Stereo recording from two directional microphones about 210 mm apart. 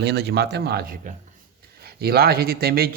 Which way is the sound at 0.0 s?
55° right (ahead or behind).